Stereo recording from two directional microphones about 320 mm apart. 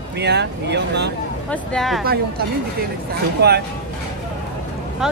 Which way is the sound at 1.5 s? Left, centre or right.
Centre.